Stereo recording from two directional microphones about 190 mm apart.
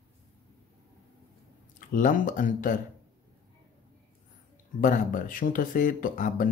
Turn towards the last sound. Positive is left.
turn(degrees=45)  # may be behind; listen again after turning